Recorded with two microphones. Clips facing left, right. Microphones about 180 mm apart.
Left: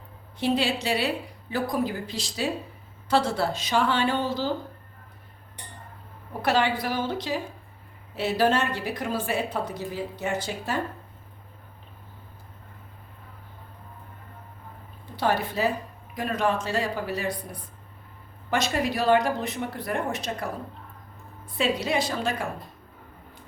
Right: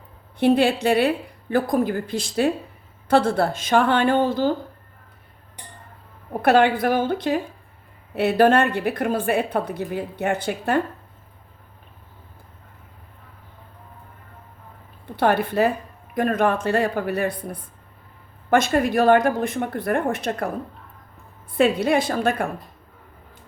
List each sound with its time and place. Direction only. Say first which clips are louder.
0.3 s a woman's voice: right 7 dB; 55° right (ahead or behind)
6.4 s a woman's voice: right 7 dB; 55° right (ahead or behind)
15.1 s a woman's voice: right 6 dB; 60° right (ahead or behind)
21.6 s a woman's voice: right 7 dB; 55° right (ahead or behind)